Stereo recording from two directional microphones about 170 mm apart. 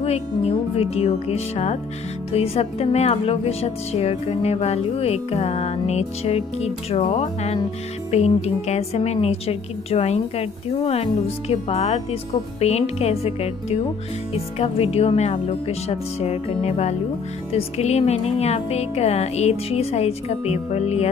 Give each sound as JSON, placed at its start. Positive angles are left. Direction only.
{"t": 0.0, "sound": "a woman's voice", "side_deg": 35}